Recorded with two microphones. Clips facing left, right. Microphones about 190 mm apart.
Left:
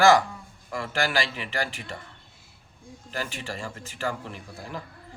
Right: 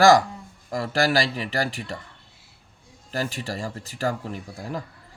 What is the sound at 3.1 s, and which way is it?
Speech, 40° right (ahead or behind).